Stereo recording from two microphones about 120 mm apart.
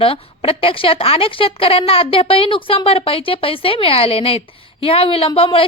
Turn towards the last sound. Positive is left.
turn(degrees=50)  # may be behind; listen again after turning